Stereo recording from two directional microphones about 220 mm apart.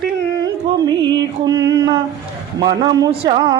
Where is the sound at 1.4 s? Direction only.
15° right (ahead or behind).